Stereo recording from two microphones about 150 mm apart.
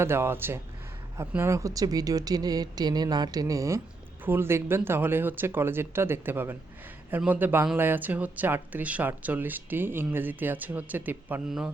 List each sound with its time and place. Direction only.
0.0 s speech: 15° right (ahead or behind)